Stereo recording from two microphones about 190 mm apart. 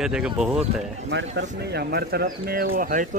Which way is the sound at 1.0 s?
65° right (ahead or behind).